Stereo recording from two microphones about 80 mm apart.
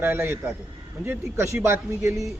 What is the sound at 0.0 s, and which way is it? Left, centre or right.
A man's voice, right.